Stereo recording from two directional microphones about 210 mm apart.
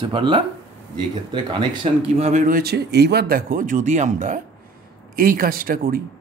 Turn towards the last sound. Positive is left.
turn(degrees=-45)  # may be behind; listen again after turning